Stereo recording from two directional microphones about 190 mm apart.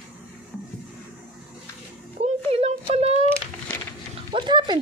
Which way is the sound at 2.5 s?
30° right (ahead or behind).